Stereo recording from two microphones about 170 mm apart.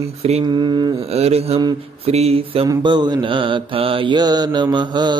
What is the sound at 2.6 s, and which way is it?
Mantra, 25° right (ahead or behind).